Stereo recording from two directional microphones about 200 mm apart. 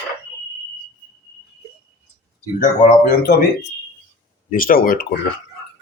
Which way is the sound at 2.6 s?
45° left (ahead or behind).